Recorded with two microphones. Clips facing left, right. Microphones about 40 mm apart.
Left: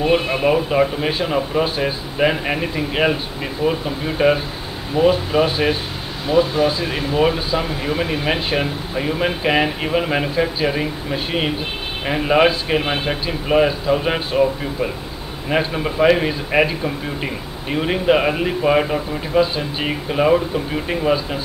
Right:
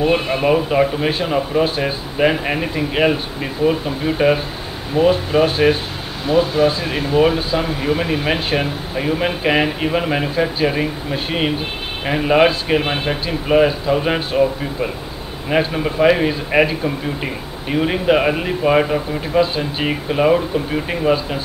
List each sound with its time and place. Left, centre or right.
0.0 s a man's voice: centre
6.5 s speech: right
7.2 s a man's voice: centre